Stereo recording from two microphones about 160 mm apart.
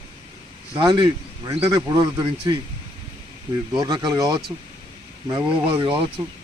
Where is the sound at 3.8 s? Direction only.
25° right (ahead or behind).